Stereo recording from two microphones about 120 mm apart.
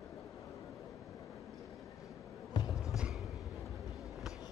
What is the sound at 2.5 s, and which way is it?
Basketball bounce, 35° left (ahead or behind).